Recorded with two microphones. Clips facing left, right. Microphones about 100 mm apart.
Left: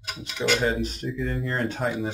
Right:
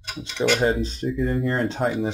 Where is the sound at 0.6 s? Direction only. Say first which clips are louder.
Right 3 dB; 30° right (ahead or behind).